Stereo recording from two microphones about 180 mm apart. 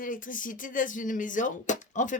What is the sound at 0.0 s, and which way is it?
A man's voice, 50° left (ahead or behind).